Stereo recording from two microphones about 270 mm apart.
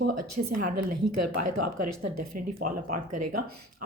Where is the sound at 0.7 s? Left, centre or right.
Right.